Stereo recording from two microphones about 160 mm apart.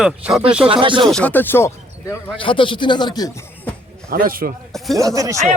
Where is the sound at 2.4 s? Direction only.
30° left (ahead or behind).